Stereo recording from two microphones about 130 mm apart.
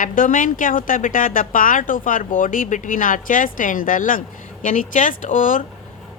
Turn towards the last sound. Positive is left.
turn(degrees=90)